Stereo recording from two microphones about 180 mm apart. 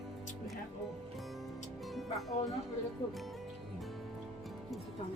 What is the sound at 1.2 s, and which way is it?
Music, centre (ahead or behind).